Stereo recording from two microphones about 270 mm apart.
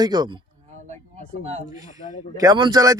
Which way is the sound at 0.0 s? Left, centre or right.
Centre.